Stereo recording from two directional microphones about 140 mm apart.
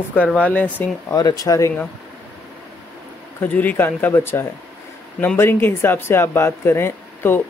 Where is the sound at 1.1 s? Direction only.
25° left (ahead or behind).